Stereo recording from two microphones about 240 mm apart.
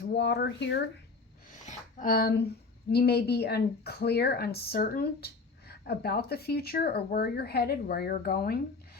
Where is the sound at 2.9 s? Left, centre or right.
Left.